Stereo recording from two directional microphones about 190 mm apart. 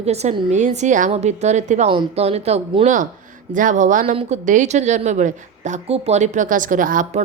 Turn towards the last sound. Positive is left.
turn(degrees=-45)  # may be behind; listen again after turning